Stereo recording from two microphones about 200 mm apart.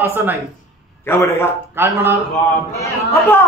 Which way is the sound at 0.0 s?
10° right (ahead or behind).